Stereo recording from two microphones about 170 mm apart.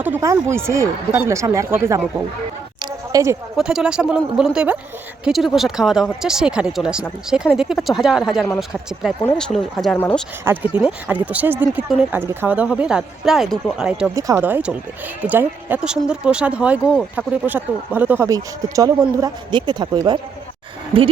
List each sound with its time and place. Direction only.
0.0 s speech: 15° right (ahead or behind)
3.1 s speech: 20° right (ahead or behind)
3.6 s speech: 5° right (ahead or behind)
10.4 s speech: 10° right (ahead or behind)
14.2 s speech: 15° right (ahead or behind)